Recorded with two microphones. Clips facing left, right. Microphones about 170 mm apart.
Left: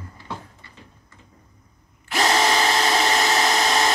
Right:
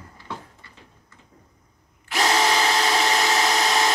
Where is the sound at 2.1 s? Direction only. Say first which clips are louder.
Left 1 dB; 5° right (ahead or behind).